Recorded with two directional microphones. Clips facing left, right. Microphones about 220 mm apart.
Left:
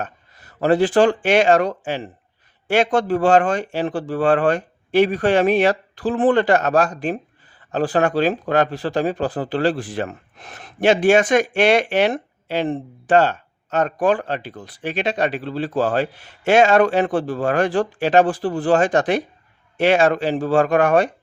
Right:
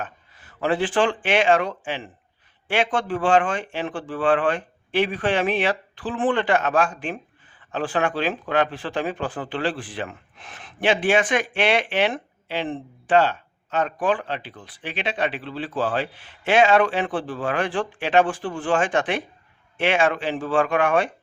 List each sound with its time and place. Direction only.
0.0 s speech: 40° left (ahead or behind)